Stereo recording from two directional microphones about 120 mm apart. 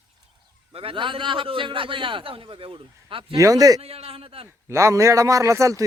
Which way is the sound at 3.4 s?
30° right (ahead or behind).